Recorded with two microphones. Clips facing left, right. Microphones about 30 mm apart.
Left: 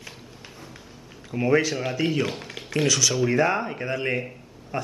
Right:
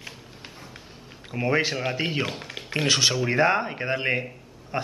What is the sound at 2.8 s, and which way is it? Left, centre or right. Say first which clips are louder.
A man's voice: even; right.